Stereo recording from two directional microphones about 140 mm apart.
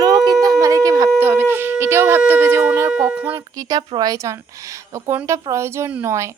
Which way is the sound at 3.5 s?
30° right (ahead or behind).